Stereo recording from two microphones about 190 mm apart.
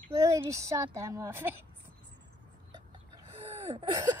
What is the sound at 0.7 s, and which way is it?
Speech, 15° right (ahead or behind).